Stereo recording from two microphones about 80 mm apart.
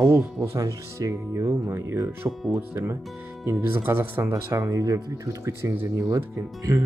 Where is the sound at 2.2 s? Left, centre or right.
Right.